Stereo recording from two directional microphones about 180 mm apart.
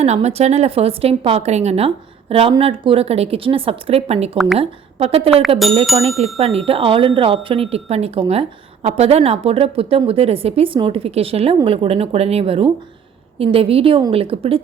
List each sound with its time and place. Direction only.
0.0 s a woman's voice: 35° right (ahead or behind)